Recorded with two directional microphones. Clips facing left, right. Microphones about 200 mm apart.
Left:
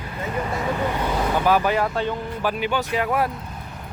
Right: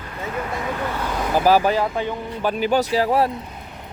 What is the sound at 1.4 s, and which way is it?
Speech, 30° right (ahead or behind).